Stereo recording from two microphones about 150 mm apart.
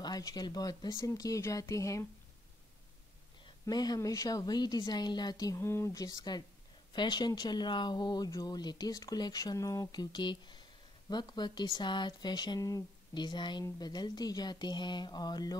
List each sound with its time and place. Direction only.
0.0 s speech: 25° left (ahead or behind)
3.6 s speech: 25° left (ahead or behind)